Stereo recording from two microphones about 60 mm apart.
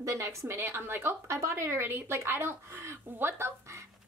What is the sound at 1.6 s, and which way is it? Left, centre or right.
Speech, right.